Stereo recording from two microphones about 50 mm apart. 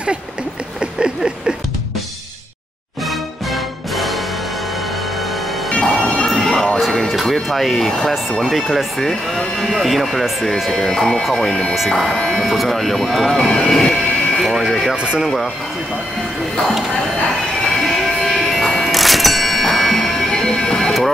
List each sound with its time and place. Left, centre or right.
0.7 s a sound: centre
3.1 s music: centre
5.7 s music: centre
7.4 s speech: centre
14.4 s speech: centre
15.0 s speech: centre
15.2 s speech: centre
16.5 s speech: centre
17.8 s music: centre